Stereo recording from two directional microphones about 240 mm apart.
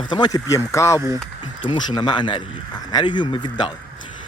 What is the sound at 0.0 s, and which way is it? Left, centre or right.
Speech, centre.